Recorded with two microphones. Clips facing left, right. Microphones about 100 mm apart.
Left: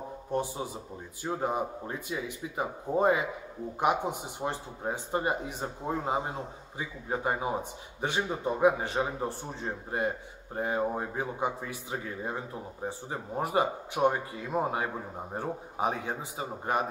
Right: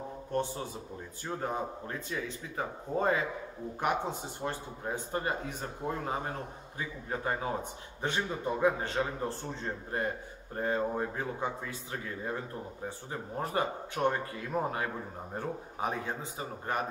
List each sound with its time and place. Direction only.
0.3 s a man's voice: 15° left (ahead or behind)